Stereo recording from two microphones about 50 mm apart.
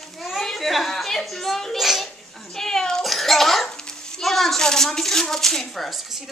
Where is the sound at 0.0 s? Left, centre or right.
Centre.